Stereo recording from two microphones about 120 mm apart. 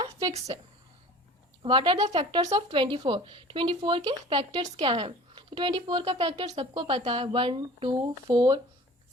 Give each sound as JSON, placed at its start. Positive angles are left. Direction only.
{"t": 1.6, "sound": "speech", "side_deg": -45}
{"t": 4.5, "sound": "speech", "side_deg": -55}
{"t": 6.6, "sound": "speech", "side_deg": -45}